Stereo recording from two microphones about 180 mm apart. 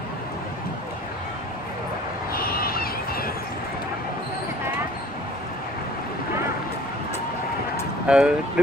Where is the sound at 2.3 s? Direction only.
55° left (ahead or behind).